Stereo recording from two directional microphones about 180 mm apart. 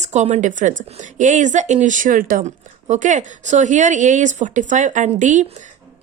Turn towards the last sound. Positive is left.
turn(degrees=-45)  # may be behind; listen again after turning